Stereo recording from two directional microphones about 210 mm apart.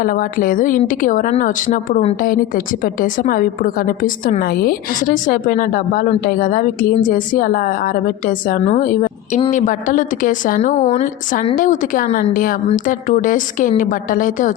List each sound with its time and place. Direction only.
0.0 s a woman's voice: 40° left (ahead or behind)